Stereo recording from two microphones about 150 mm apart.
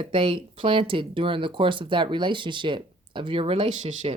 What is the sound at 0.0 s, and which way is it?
Speech, 35° right (ahead or behind).